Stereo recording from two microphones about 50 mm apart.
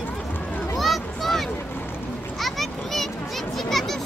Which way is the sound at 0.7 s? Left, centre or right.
Centre.